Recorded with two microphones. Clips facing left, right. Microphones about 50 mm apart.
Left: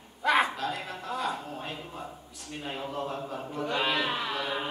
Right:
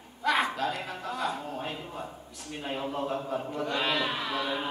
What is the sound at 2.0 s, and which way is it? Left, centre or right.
A man's voice, centre.